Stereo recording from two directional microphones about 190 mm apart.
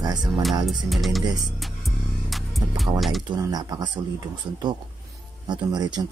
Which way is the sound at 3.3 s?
20° right (ahead or behind).